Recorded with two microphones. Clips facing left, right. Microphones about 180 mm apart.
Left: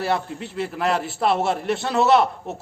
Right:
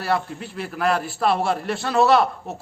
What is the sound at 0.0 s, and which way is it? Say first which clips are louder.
A man's voice: even; 25° left (ahead or behind).